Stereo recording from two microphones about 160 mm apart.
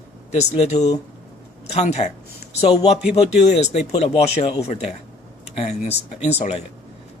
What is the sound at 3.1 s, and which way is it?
Speech, 40° left (ahead or behind).